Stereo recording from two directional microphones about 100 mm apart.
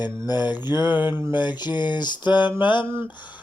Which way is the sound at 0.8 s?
20° right (ahead or behind).